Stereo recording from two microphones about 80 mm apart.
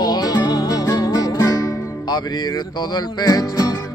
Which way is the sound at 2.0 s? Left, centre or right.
Left.